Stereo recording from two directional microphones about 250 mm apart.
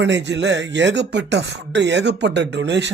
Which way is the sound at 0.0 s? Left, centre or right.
Right.